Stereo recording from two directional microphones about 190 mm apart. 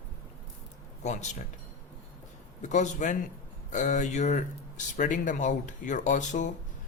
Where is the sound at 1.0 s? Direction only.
40° left (ahead or behind).